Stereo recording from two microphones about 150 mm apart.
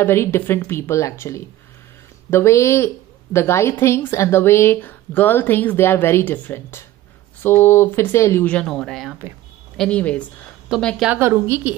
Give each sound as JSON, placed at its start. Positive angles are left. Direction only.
{"t": 0.0, "sound": "a woman's voice", "side_deg": 15}
{"t": 11.1, "sound": "a woman's voice", "side_deg": -15}